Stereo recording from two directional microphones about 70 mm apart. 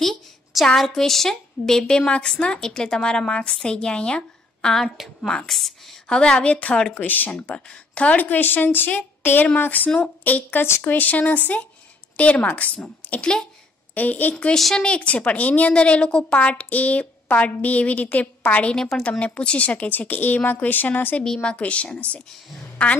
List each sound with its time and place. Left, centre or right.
0.0 s a woman's voice: centre; by 14.3 s left
14.3 s a woman's voice: centre
14.9 s a woman's voice: centre
21.2 s a woman's voice: centre